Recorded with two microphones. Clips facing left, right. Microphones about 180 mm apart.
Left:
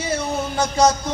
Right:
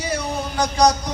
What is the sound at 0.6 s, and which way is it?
Music, 15° right (ahead or behind).